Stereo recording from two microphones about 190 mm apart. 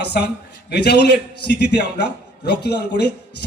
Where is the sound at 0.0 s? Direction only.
60° left (ahead or behind).